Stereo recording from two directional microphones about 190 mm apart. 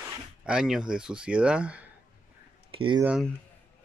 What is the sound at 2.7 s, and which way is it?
Speech, 25° right (ahead or behind).